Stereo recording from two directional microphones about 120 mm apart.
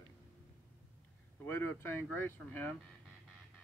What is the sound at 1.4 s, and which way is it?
Speech, 20° left (ahead or behind).